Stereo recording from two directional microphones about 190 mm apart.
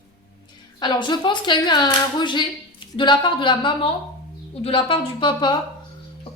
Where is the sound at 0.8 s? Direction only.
25° left (ahead or behind).